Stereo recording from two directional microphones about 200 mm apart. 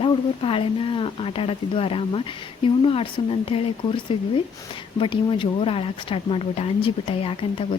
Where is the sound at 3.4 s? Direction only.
25° left (ahead or behind).